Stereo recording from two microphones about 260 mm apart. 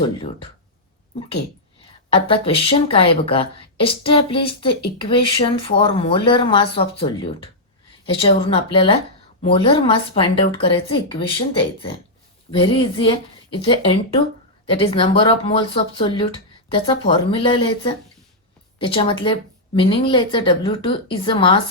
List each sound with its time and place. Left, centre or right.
2.1 s a woman's voice: left